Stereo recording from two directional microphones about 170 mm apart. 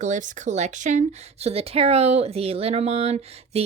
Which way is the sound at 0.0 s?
45° right (ahead or behind).